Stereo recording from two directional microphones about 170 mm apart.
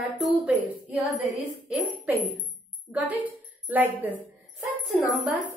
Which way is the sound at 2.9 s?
10° right (ahead or behind).